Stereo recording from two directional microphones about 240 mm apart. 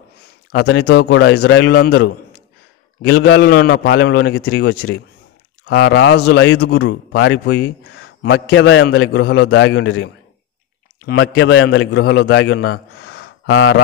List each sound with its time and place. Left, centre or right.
0.6 s a man's voice: left